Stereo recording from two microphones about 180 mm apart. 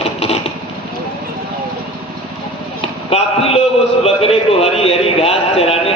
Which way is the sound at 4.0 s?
35° left (ahead or behind).